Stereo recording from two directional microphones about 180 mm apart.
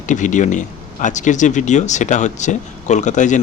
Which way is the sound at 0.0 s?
45° left (ahead or behind).